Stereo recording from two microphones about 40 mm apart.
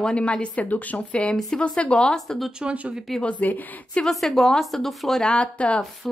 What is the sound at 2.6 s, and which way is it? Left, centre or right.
Speech, right.